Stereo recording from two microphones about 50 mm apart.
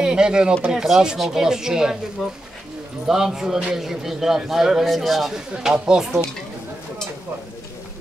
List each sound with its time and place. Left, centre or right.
0.0 s a man's voice: centre
3.1 s a man's voice: centre